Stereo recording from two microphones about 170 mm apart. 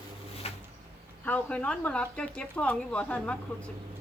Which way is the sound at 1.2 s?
10° left (ahead or behind).